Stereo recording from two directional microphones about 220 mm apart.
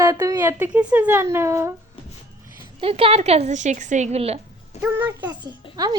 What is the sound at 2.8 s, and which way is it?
A woman's voice, 25° right (ahead or behind).